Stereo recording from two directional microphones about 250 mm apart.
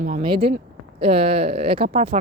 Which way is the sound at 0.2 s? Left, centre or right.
Right.